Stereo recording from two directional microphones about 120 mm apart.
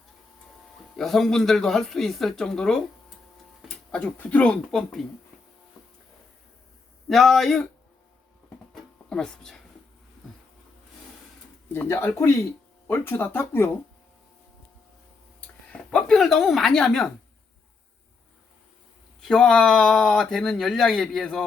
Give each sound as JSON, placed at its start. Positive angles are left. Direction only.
{"t": 0.9, "sound": "speech", "side_deg": 0}
{"t": 3.9, "sound": "speech", "side_deg": 10}
{"t": 7.1, "sound": "speech", "side_deg": 0}
{"t": 8.7, "sound": "music", "side_deg": 5}
{"t": 11.7, "sound": "speech", "side_deg": 20}
{"t": 15.4, "sound": "a sound", "side_deg": 10}
{"t": 19.2, "sound": "speech", "side_deg": 5}